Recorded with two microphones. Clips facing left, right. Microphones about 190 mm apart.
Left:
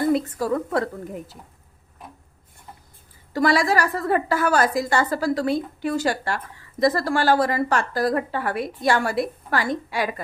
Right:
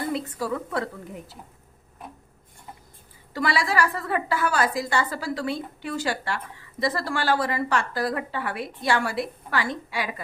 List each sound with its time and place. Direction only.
0.1 s a woman's voice: 45° left (ahead or behind)
3.3 s a woman's voice: 45° left (ahead or behind)